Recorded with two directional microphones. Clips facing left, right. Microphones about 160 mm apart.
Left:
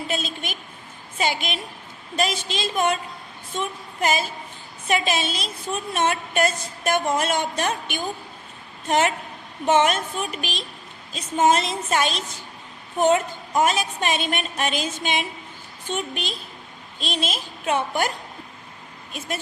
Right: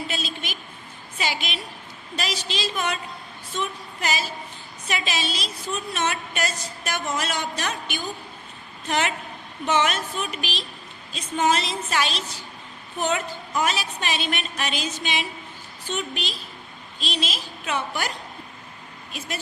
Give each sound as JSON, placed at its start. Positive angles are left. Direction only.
{"t": 0.1, "sound": "a woman's voice", "side_deg": 50}
{"t": 3.5, "sound": "a sound", "side_deg": 50}
{"t": 4.9, "sound": "a woman's voice", "side_deg": 50}